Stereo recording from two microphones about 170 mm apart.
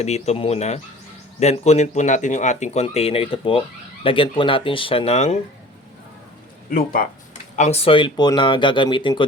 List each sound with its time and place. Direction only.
0.0 s speech: 40° left (ahead or behind)
6.7 s speech: 60° left (ahead or behind)
7.5 s speech: 40° left (ahead or behind)